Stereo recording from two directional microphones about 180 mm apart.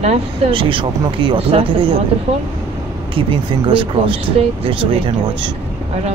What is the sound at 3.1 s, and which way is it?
Speech, 30° right (ahead or behind).